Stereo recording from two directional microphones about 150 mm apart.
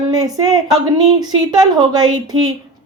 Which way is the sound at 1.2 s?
25° right (ahead or behind).